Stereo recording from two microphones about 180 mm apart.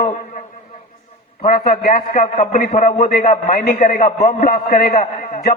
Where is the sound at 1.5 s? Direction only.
55° left (ahead or behind).